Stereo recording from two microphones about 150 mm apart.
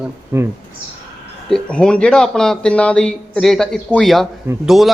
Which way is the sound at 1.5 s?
5° left (ahead or behind).